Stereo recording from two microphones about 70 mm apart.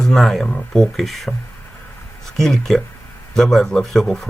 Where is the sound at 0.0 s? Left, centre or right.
Centre.